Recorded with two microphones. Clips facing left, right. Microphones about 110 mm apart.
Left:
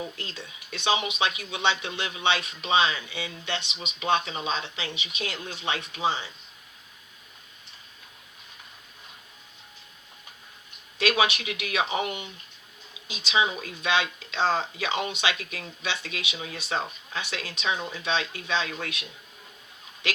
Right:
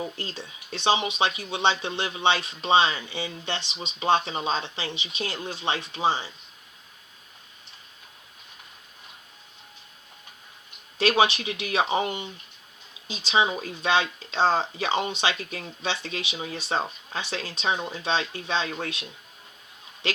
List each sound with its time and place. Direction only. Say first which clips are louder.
0.0 s speech: right 3 dB; 30° right (ahead or behind)
10.9 s speech: right 3 dB; 30° right (ahead or behind)